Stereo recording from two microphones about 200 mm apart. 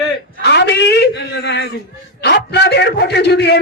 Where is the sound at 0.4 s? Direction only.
60° left (ahead or behind).